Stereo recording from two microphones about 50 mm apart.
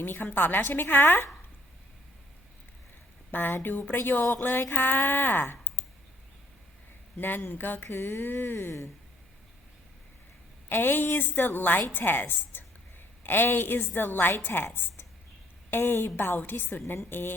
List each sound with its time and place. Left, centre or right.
0.0 s a woman's voice: left
3.3 s a woman's voice: left
7.2 s a woman's voice: left
10.7 s a woman's voice: left